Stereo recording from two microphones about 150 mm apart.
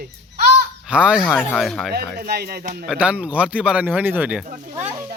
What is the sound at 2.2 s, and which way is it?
Speech, 90° right.